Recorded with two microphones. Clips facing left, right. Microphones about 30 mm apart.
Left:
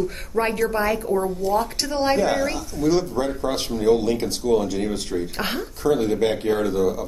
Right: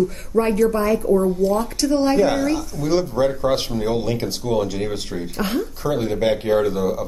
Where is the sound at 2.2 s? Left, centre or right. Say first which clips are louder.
Right 3 dB; centre.